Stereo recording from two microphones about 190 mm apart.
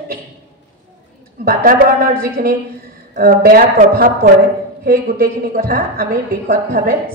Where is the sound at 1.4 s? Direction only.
50° right (ahead or behind).